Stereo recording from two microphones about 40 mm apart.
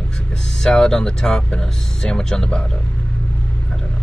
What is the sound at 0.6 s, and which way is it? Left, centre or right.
Speech, centre.